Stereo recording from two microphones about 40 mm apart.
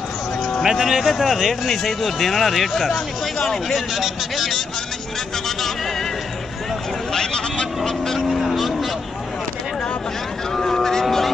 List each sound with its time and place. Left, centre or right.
0.7 s speech: centre
7.1 s speech: centre
8.3 s speech: centre
10.5 s speech: centre